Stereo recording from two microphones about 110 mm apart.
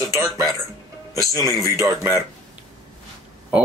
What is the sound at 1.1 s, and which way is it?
Speech, 30° right (ahead or behind).